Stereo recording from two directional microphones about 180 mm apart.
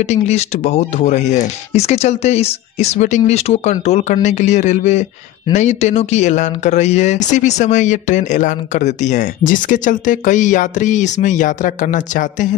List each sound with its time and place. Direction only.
0.0 s speech: 40° left (ahead or behind)